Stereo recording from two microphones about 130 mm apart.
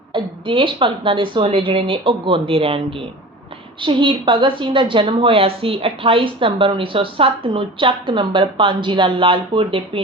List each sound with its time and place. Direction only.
0.1 s a woman's voice: 40° right (ahead or behind)